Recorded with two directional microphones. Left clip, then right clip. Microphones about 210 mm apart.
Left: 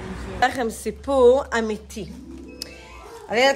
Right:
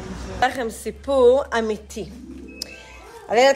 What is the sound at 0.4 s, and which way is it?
A woman's voice, 20° left (ahead or behind).